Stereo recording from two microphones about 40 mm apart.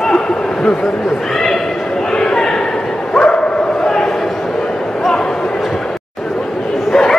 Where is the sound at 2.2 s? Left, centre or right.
Centre.